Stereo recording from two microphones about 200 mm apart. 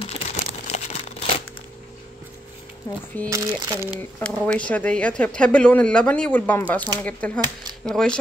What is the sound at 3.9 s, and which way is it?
A woman's voice, 10° left (ahead or behind).